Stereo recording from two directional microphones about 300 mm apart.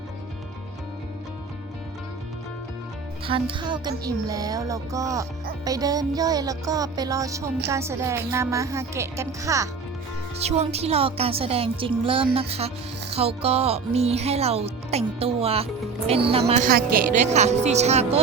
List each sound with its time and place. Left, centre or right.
3.2 s music: centre
10.3 s speech: right